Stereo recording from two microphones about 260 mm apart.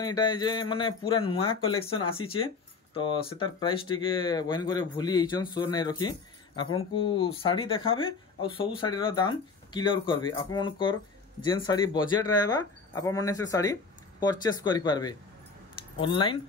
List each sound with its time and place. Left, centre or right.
0.0 s a man's voice: centre